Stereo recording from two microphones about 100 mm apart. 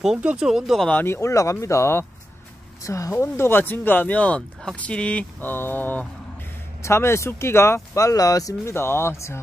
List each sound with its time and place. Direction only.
0.0 s speech: 5° right (ahead or behind)
1.0 s speech: 25° left (ahead or behind)